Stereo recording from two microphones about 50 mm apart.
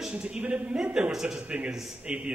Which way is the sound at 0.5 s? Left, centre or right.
Centre.